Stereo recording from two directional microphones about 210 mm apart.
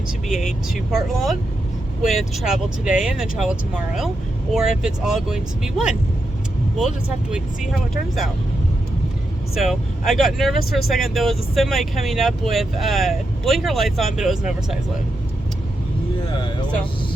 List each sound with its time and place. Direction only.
0.9 s speech: centre (ahead or behind)
9.6 s speech: centre (ahead or behind)
16.2 s speech: 25° left (ahead or behind)